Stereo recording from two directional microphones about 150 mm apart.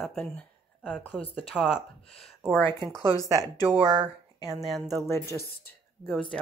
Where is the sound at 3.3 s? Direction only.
20° right (ahead or behind).